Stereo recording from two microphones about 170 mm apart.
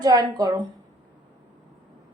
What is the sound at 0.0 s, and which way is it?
Speech, 25° right (ahead or behind).